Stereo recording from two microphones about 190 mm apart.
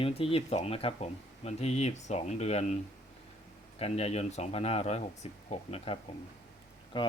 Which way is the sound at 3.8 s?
35° left (ahead or behind).